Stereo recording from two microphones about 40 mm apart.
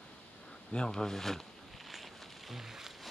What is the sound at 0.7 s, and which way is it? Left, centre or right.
Speech, centre.